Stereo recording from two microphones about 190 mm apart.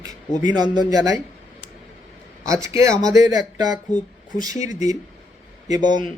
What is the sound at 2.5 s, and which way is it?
Speech, 15° right (ahead or behind).